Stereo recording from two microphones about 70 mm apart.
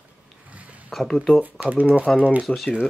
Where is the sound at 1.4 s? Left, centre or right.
Right.